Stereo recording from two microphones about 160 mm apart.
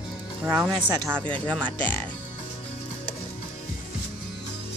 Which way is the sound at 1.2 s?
10° left (ahead or behind).